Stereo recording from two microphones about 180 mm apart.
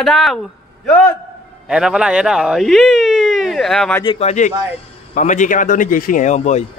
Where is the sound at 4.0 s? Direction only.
30° left (ahead or behind).